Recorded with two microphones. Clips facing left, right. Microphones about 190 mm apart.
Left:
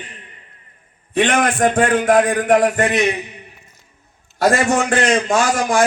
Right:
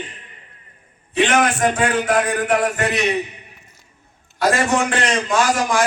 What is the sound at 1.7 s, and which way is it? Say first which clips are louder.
A man's voice: left 4 dB; 50° left (ahead or behind).